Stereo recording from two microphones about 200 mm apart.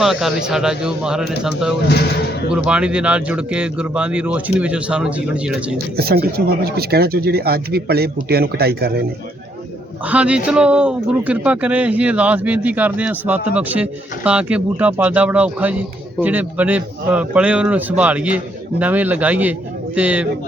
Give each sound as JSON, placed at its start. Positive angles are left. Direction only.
{"t": 0.0, "sound": "speech", "side_deg": 0}
{"t": 1.9, "sound": "a man's voice", "side_deg": 55}
{"t": 2.5, "sound": "speech", "side_deg": -5}
{"t": 5.7, "sound": "speech", "side_deg": -50}
{"t": 10.0, "sound": "a man's voice", "side_deg": -5}